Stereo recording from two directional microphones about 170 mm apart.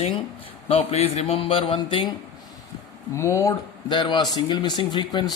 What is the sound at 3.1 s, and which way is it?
Speech, 15° left (ahead or behind).